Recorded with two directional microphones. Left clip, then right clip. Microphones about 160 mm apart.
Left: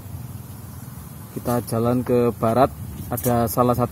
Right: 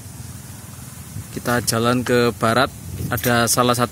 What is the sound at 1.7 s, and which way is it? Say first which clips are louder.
Speech: right 2 dB; 30° right (ahead or behind).